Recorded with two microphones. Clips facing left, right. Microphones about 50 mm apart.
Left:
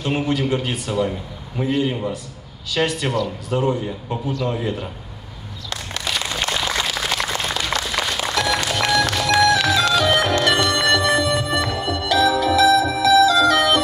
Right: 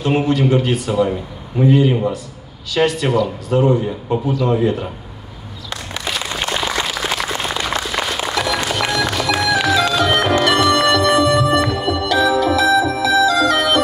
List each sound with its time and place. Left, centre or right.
0.0 s a man's voice: centre
5.7 s a sound: centre
7.3 s applause: centre
7.8 s music: centre